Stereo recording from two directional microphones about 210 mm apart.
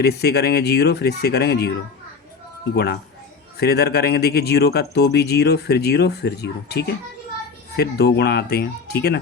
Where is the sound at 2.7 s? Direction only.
50° left (ahead or behind).